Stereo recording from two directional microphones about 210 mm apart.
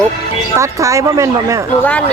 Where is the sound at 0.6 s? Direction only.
15° right (ahead or behind).